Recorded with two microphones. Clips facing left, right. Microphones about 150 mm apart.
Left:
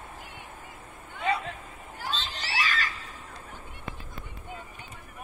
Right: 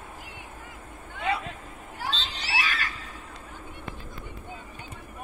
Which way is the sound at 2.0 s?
65° right (ahead or behind).